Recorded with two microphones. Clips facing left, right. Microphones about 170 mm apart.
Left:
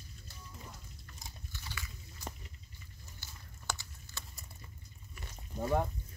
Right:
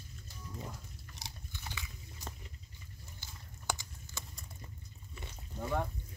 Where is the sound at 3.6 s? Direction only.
15° right (ahead or behind).